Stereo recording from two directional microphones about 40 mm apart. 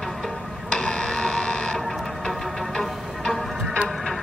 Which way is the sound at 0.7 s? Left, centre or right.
Left.